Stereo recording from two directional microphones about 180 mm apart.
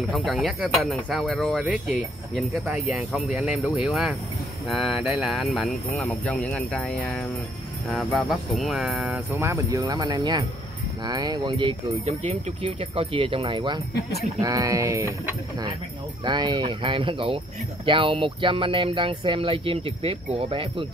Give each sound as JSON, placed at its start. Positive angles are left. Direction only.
{"t": 0.1, "sound": "speech", "side_deg": 0}
{"t": 9.3, "sound": "speech", "side_deg": -15}
{"t": 16.3, "sound": "speech", "side_deg": -25}